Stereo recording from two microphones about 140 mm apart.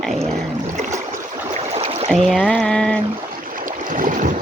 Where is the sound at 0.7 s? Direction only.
60° right (ahead or behind).